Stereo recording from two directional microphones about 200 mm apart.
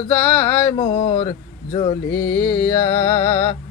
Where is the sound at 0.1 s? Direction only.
10° left (ahead or behind).